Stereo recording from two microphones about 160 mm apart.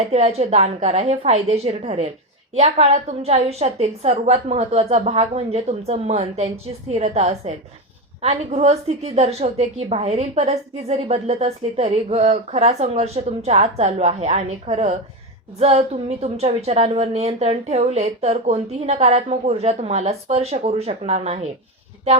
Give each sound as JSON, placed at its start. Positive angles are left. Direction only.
{"t": 0.0, "sound": "a woman's voice", "side_deg": -40}